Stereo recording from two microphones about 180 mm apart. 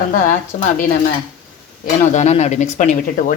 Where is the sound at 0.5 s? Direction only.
45° left (ahead or behind).